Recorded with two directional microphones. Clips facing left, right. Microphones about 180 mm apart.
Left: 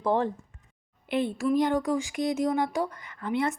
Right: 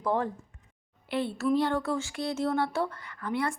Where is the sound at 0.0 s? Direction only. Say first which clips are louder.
Left 3 dB; 25° left (ahead or behind).